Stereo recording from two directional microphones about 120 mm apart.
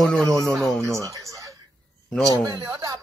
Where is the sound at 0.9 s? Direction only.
25° right (ahead or behind).